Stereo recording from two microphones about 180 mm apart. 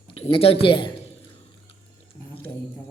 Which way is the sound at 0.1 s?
30° left (ahead or behind).